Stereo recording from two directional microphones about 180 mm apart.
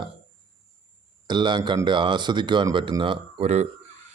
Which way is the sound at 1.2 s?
25° right (ahead or behind).